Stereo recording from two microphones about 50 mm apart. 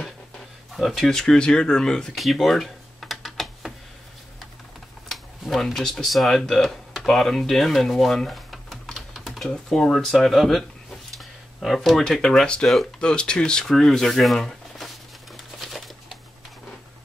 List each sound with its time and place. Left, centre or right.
0.8 s speech: centre
2.1 s computer keyboard: centre
5.1 s a sound: centre
5.7 s speech: centre
6.4 s a sound: centre
9.4 s speech: centre
11.1 s a sound: centre
12.1 s speech: centre
13.7 s speech: centre
15.3 s bird: centre